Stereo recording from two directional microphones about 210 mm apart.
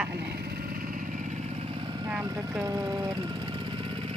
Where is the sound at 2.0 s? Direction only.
15° right (ahead or behind).